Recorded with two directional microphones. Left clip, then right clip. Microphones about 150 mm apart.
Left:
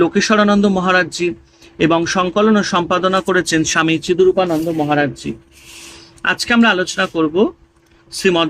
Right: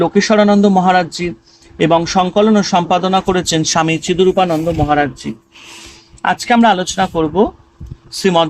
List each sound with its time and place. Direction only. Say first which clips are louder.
0.0 s speech: right 2 dB; 35° right (ahead or behind)
6.4 s speech: right 3 dB; 35° right (ahead or behind)